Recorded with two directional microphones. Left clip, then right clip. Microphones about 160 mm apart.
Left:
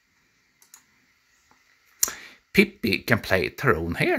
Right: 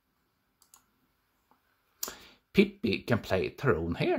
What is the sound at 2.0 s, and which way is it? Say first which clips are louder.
Speech: left 12 dB; 15° left (ahead or behind).